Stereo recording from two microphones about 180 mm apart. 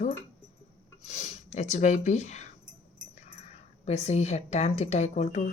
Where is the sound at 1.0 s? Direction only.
35° left (ahead or behind).